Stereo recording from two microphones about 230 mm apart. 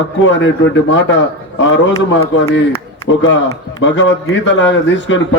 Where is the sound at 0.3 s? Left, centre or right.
Left.